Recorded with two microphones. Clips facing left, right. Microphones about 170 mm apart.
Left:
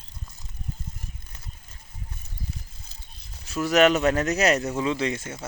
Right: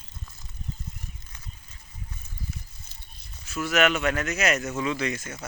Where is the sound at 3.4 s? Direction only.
35° left (ahead or behind).